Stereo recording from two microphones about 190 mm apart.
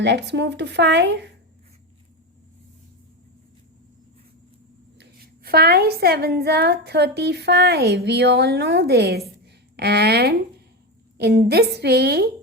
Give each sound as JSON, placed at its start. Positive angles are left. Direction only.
{"t": 0.0, "sound": "a woman's voice", "side_deg": -65}
{"t": 4.9, "sound": "a woman's voice", "side_deg": -55}
{"t": 9.4, "sound": "a sound", "side_deg": -60}
{"t": 11.2, "sound": "a woman's voice", "side_deg": -60}